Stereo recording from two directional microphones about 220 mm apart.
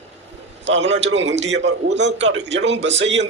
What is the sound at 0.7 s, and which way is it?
A man's voice, 55° right (ahead or behind).